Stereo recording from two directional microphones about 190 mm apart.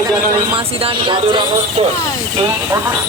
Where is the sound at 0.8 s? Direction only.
30° right (ahead or behind).